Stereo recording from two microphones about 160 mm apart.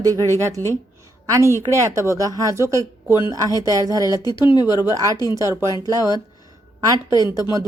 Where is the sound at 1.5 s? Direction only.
15° right (ahead or behind).